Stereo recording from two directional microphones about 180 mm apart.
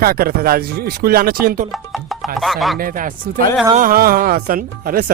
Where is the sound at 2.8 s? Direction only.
50° right (ahead or behind).